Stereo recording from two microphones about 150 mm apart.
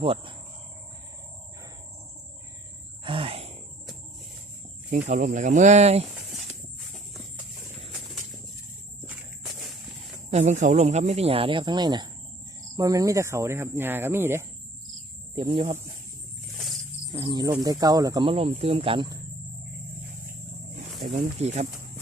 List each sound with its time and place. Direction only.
0.0 s speech: 35° right (ahead or behind)
3.0 s sigh: 35° right (ahead or behind)
4.9 s speech: 55° right (ahead or behind)
10.0 s speech: 50° right (ahead or behind); by 14.4 s 15° right (ahead or behind)
15.4 s speech: 35° right (ahead or behind)
16.6 s roaring cats: centre (ahead or behind)
17.2 s speech: 30° right (ahead or behind)
21.0 s speech: 55° right (ahead or behind)